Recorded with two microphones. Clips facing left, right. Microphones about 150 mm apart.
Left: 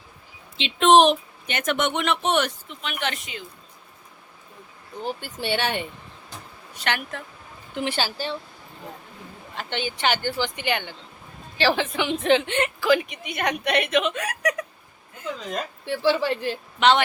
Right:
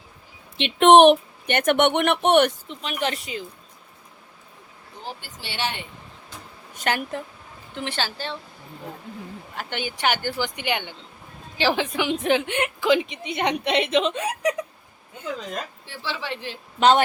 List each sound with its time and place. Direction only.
0.5 s speech: 60° right (ahead or behind)
2.6 s speech: 35° right (ahead or behind)
5.4 s speech: 55° left (ahead or behind)
6.7 s speech: 40° right (ahead or behind)
7.8 s a woman's voice: 10° left (ahead or behind)
9.6 s speech: 10° right (ahead or behind)
12.9 s a woman's voice: 25° right (ahead or behind)
15.9 s speech: 50° left (ahead or behind)
16.8 s speech: 40° right (ahead or behind)